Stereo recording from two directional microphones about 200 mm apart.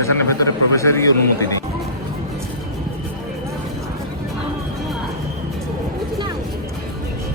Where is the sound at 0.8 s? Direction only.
15° left (ahead or behind).